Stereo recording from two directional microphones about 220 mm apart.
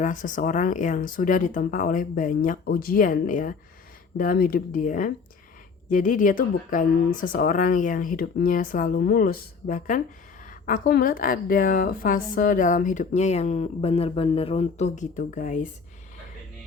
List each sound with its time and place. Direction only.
0.0 s a woman's voice: 35° left (ahead or behind)